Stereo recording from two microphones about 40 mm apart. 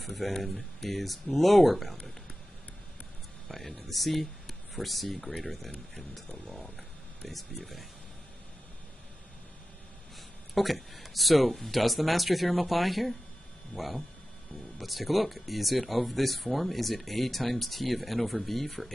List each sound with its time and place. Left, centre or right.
0.0 s speech: centre
3.4 s speech: centre
10.5 s speech: centre
13.7 s speech: left
14.8 s speech: centre